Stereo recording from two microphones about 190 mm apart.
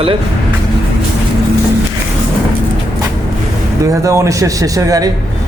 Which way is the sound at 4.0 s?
15° right (ahead or behind).